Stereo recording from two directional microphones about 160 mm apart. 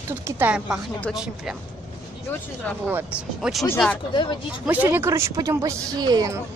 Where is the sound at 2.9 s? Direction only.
10° right (ahead or behind).